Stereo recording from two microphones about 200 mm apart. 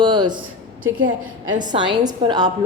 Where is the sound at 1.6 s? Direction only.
20° right (ahead or behind).